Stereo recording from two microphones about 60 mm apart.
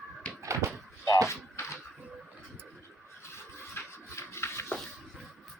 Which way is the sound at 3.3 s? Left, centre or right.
Left.